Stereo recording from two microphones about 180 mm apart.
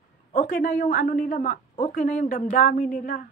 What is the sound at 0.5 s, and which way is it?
A woman's voice, 50° left (ahead or behind).